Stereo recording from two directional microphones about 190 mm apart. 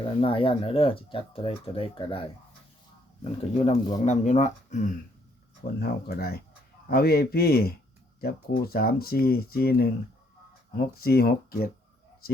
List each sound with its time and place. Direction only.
0.0 s speech: 30° left (ahead or behind)
3.5 s speech: 35° left (ahead or behind)
5.8 s speech: 55° left (ahead or behind)